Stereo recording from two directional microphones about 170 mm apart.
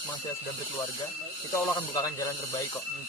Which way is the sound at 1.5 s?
20° left (ahead or behind).